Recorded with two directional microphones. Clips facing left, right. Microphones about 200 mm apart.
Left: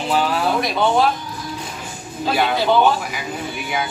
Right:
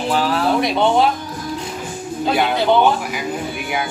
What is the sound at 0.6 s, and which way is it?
Speech, 25° right (ahead or behind).